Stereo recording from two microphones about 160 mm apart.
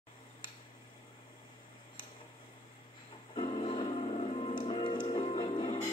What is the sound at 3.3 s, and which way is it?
Music, 35° left (ahead or behind).